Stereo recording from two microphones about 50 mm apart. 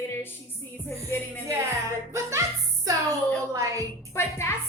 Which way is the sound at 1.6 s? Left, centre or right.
Right.